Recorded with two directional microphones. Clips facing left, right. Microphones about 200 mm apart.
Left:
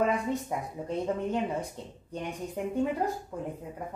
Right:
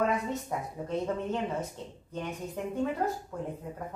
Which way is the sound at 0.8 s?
15° left (ahead or behind).